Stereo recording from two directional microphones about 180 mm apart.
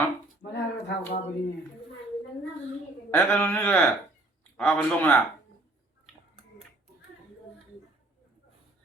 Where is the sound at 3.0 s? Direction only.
10° left (ahead or behind).